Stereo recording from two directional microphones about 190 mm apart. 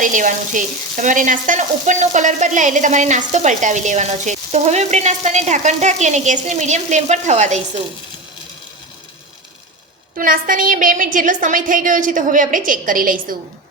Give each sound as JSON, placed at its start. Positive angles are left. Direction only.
{"t": 0.0, "sound": "frying", "side_deg": -45}
{"t": 10.2, "sound": "a woman's voice", "side_deg": -45}